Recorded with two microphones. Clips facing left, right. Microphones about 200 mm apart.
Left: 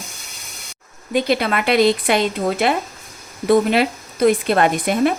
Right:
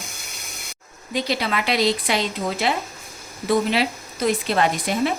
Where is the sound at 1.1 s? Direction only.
55° left (ahead or behind).